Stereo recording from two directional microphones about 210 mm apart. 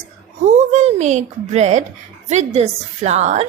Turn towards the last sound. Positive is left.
turn(degrees=-35)  # may be behind; listen again after turning